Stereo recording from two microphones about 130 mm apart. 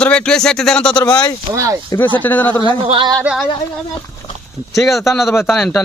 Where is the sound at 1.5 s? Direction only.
25° right (ahead or behind).